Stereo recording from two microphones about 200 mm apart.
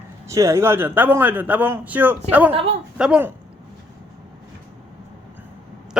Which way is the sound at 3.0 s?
5° right (ahead or behind).